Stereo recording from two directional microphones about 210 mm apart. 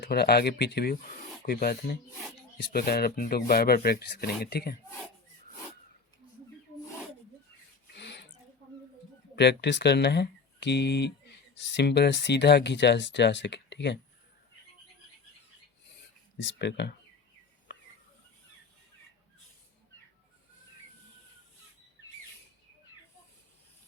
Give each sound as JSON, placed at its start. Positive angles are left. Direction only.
{"t": 0.0, "sound": "speech", "side_deg": 50}
{"t": 7.9, "sound": "a sound", "side_deg": 55}
{"t": 9.3, "sound": "speech", "side_deg": 55}
{"t": 16.4, "sound": "speech", "side_deg": 55}